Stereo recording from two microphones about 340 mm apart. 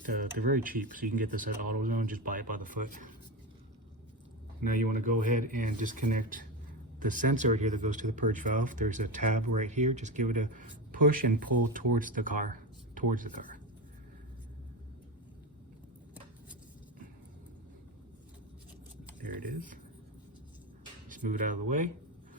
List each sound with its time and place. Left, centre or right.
0.1 s speech: right
4.6 s speech: right
12.9 s a sound: right
21.1 s speech: right